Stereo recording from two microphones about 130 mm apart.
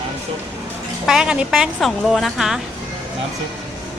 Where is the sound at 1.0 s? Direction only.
5° right (ahead or behind).